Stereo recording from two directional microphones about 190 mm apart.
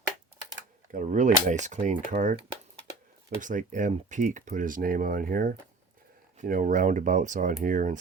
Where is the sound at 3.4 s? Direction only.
45° right (ahead or behind).